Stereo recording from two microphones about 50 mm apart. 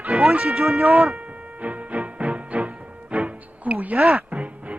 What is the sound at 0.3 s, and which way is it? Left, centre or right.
Speech, centre.